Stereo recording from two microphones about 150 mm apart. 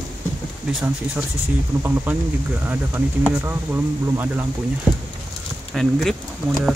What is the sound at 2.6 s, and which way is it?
Speech, 15° right (ahead or behind).